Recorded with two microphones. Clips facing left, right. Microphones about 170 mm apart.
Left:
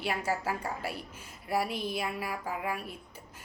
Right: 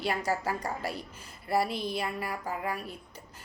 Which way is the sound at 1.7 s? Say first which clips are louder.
Right 1 dB; 35° right (ahead or behind).